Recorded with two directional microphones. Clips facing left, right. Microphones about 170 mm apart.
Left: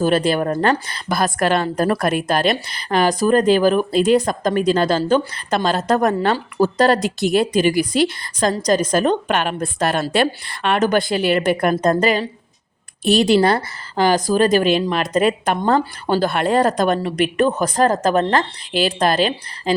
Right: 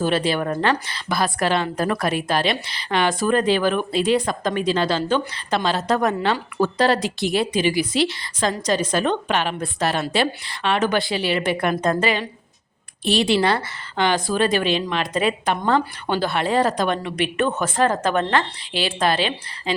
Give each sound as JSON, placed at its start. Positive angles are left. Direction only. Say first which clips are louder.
{"t": 0.0, "sound": "speech", "louder": "left 4 dB", "side_deg": 45}